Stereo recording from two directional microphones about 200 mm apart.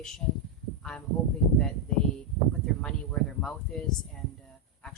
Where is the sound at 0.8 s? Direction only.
5° left (ahead or behind).